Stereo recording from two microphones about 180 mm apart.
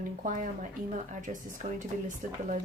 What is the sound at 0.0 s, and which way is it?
Speech, 45° right (ahead or behind).